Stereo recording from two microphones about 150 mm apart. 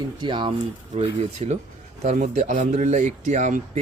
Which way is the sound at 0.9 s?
45° right (ahead or behind).